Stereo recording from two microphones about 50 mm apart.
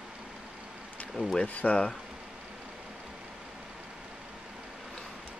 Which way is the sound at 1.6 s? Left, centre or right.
Left.